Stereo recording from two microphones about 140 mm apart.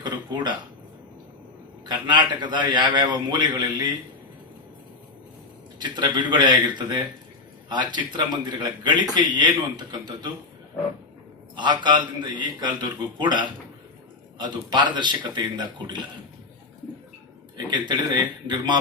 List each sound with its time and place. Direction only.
0.0 s a sound: 35° right (ahead or behind)
1.9 s a man's voice: 35° right (ahead or behind)
5.8 s a man's voice: 35° right (ahead or behind)
11.5 s a man's voice: 35° right (ahead or behind)
17.7 s a man's voice: 30° right (ahead or behind)